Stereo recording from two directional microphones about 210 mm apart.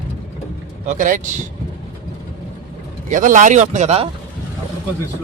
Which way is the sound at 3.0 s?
40° right (ahead or behind).